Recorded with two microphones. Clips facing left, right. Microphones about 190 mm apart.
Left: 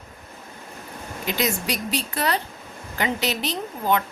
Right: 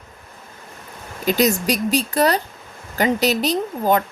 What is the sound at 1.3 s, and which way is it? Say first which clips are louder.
A woman's voice: right 8 dB; 40° right (ahead or behind).